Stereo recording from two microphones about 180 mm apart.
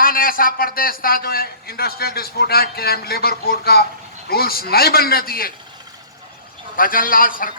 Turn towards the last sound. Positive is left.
turn(degrees=50)  # may be behind; listen again after turning